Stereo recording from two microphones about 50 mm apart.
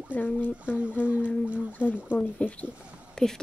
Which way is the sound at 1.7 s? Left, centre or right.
Left.